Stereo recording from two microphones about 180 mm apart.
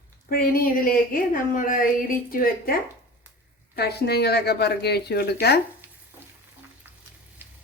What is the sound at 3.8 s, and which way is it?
A woman's voice, 65° left (ahead or behind).